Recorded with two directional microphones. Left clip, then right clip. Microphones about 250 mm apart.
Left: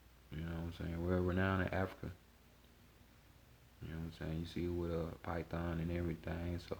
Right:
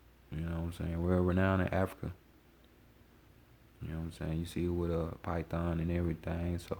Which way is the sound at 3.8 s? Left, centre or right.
Right.